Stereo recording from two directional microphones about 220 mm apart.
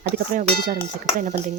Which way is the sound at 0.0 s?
40° right (ahead or behind).